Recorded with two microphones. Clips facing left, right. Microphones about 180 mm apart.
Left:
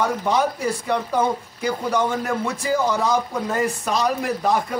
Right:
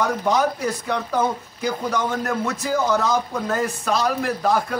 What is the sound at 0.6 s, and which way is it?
A man's voice, 10° left (ahead or behind).